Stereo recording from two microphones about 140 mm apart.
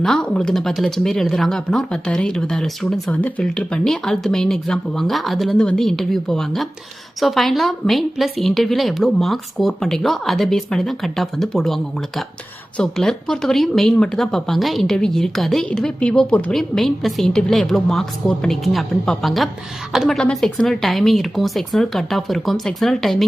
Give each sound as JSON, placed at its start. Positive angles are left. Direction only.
{"t": 0.0, "sound": "speech", "side_deg": 5}